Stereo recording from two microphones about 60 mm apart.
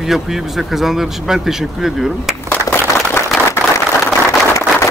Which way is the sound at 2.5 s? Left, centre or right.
Left.